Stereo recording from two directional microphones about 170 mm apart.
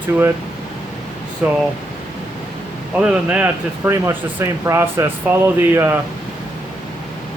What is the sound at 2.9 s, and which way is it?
Speech, 5° right (ahead or behind).